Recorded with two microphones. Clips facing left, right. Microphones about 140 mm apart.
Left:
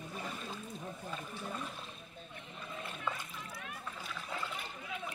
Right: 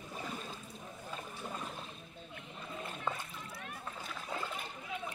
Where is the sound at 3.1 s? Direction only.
30° right (ahead or behind).